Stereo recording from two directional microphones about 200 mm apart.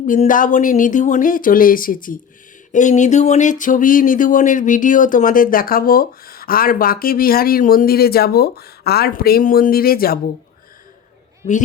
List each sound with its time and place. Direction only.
0.0 s speech: 40° left (ahead or behind)